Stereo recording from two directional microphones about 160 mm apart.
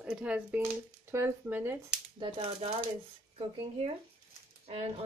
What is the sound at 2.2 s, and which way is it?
Speech, 35° right (ahead or behind).